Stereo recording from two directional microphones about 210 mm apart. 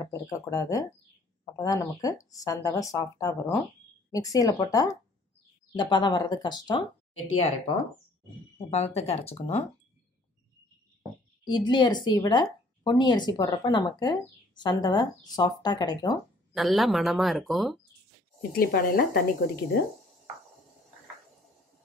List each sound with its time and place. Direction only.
0.0 s a woman's voice: 15° left (ahead or behind)
8.5 s speech: 30° left (ahead or behind)
11.4 s speech: 20° left (ahead or behind)
16.5 s speech: centre (ahead or behind)
18.6 s a woman's voice: 45° left (ahead or behind)